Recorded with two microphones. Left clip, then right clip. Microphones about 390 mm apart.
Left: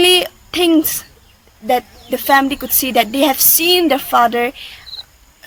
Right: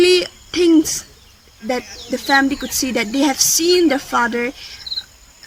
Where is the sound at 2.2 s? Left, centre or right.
Centre.